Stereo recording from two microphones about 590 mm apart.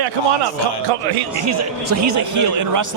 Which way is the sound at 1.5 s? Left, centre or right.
Right.